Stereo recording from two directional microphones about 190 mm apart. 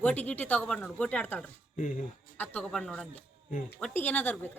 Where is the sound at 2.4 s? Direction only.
5° left (ahead or behind).